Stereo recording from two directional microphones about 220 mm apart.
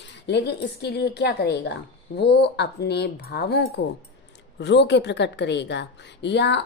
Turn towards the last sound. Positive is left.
turn(degrees=50)  # may be behind; listen again after turning